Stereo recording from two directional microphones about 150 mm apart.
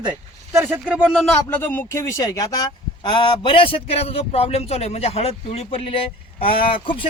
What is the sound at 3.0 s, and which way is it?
A man's voice, 35° left (ahead or behind).